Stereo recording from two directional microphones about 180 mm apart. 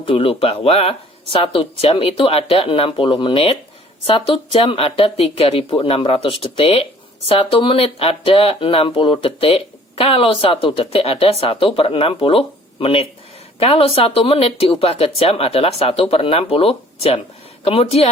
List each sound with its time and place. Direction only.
0.0 s speech: 30° left (ahead or behind)
4.6 s speech: 30° left (ahead or behind)